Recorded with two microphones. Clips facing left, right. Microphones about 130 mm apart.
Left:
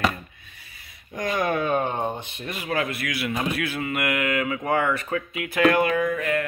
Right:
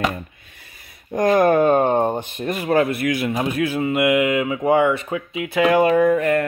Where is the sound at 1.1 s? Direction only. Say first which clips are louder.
Right 10 dB; 45° right (ahead or behind).